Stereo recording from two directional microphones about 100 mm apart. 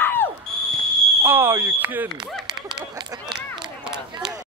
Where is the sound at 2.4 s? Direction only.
45° right (ahead or behind).